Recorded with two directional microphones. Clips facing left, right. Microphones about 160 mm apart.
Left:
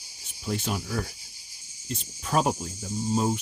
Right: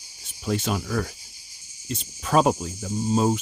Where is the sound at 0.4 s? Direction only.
90° right.